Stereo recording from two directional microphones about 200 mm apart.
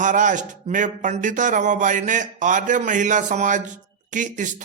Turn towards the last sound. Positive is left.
turn(degrees=-40)  # may be behind; listen again after turning